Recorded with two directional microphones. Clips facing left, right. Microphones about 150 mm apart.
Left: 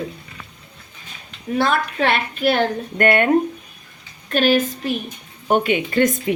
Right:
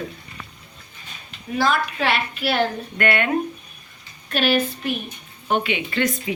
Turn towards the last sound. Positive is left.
turn(degrees=45)  # may be behind; listen again after turning